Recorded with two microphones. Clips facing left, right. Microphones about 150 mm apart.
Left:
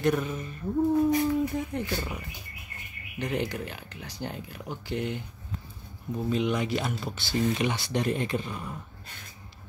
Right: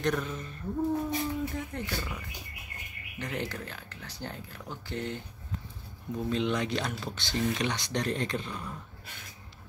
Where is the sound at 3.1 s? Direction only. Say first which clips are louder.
Left 5 dB; 15° left (ahead or behind).